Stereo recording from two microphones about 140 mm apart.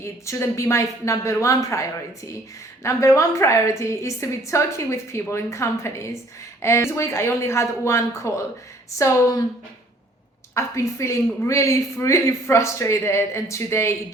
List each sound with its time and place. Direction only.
0.0 s a man's voice: 20° left (ahead or behind)
10.5 s a man's voice: 20° left (ahead or behind)